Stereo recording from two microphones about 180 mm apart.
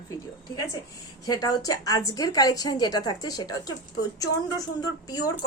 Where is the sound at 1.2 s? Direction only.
20° left (ahead or behind).